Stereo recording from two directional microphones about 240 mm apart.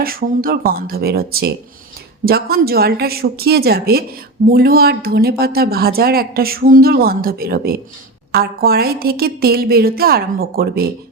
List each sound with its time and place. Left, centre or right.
0.0 s speech: right